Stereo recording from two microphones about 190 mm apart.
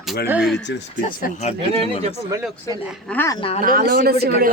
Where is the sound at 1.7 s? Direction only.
30° right (ahead or behind).